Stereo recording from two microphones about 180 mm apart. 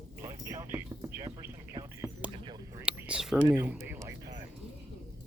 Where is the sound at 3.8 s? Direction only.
15° right (ahead or behind).